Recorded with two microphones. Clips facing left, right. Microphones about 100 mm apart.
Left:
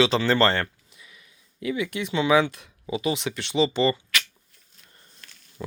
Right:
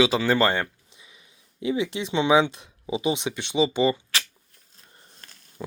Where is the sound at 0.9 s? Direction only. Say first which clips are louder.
Left 1 dB; 25° right (ahead or behind).